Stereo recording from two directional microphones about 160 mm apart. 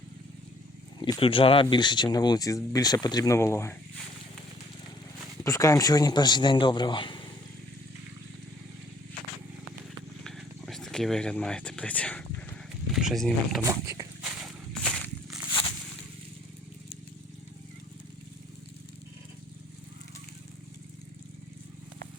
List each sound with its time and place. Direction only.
0.9 s speech: 30° left (ahead or behind)
5.4 s speech: 20° left (ahead or behind)
10.2 s a sound: 5° left (ahead or behind)
12.9 s speech: centre (ahead or behind)
13.6 s speech: 20° right (ahead or behind)
14.2 s a sound: centre (ahead or behind)